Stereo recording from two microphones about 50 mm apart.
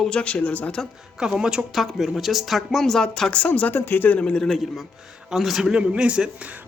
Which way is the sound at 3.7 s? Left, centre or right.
Left.